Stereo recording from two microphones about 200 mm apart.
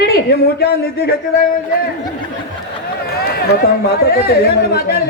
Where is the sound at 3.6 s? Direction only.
50° left (ahead or behind).